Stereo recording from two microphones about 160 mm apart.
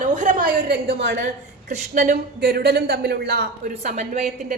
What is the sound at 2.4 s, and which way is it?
A man's voice, 75° right (ahead or behind).